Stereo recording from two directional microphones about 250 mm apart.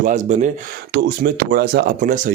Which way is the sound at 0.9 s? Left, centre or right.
Right.